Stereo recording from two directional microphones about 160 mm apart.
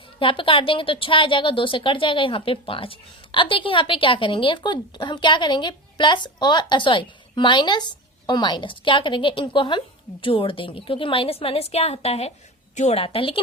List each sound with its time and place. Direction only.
0.2 s a woman's voice: 35° left (ahead or behind)